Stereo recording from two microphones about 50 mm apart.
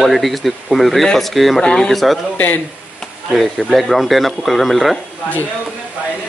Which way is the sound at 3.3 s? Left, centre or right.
Centre.